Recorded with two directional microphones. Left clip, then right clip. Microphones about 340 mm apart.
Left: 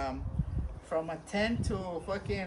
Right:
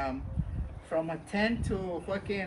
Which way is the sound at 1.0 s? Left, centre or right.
Left.